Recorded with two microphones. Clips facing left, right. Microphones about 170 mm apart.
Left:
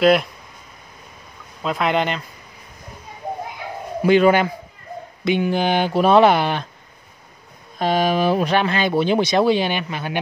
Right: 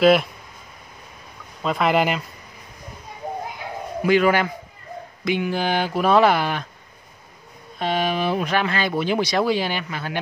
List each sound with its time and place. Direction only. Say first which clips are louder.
0.0 s speech: even; centre (ahead or behind)
1.6 s speech: right 1 dB; centre (ahead or behind)
4.0 s speech: left 3 dB; 25° left (ahead or behind)
7.8 s speech: left 4 dB; 40° left (ahead or behind); by 10.1 s 20° left (ahead or behind)